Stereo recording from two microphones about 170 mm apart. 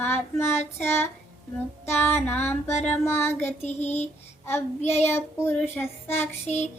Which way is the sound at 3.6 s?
40° left (ahead or behind).